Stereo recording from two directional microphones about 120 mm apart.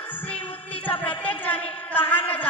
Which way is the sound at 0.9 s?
15° left (ahead or behind).